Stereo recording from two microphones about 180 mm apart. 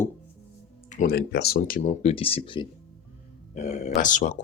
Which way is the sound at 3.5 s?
40° left (ahead or behind).